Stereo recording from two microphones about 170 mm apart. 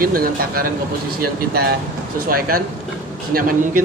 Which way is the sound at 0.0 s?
60° right (ahead or behind).